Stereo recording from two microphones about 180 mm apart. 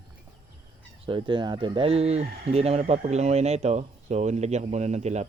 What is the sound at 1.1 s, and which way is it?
Speech, 25° right (ahead or behind).